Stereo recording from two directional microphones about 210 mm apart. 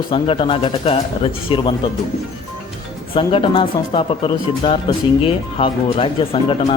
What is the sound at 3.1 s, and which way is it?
Speech, 25° left (ahead or behind).